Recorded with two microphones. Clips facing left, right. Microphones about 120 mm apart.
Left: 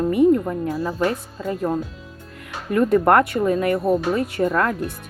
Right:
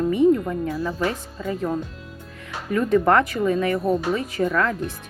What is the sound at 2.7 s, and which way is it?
Speech, 55° left (ahead or behind).